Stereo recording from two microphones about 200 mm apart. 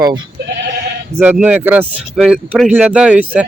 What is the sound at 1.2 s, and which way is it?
Speech, 10° right (ahead or behind).